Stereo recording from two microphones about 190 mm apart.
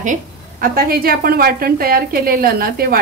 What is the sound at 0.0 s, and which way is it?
A woman's voice, 45° right (ahead or behind).